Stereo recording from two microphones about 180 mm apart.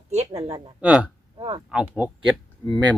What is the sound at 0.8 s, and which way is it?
Speech, 5° right (ahead or behind).